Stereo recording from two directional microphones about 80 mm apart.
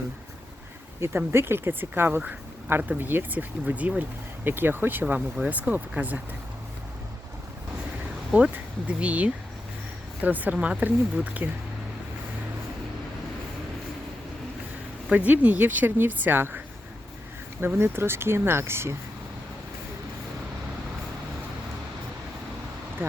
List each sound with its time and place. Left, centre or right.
0.9 s speech: right
8.3 s speech: centre
15.1 s speech: centre
17.7 s speech: right
23.0 s speech: right